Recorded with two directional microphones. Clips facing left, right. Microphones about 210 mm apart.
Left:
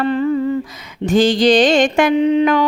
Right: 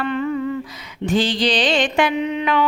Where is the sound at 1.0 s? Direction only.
45° left (ahead or behind).